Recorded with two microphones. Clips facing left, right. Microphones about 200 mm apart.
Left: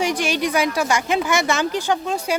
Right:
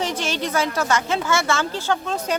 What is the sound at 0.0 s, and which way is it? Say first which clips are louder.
A woman's voice: left 4 dB; 15° left (ahead or behind).